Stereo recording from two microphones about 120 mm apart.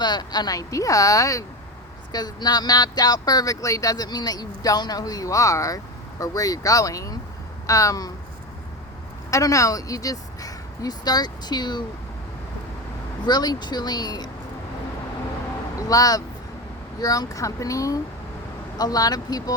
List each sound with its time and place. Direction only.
0.0 s speech: 35° left (ahead or behind)
9.3 s a woman's voice: 25° left (ahead or behind)
13.2 s speech: 35° left (ahead or behind)
15.9 s speech: 30° left (ahead or behind)